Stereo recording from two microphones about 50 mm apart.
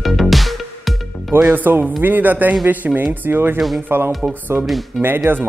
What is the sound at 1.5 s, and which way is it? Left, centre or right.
Speech, right.